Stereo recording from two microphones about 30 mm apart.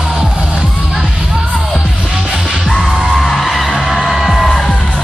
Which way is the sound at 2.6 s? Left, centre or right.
Centre.